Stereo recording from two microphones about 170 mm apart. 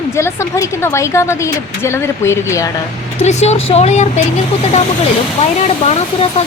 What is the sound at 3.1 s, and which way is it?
Speech, 40° left (ahead or behind).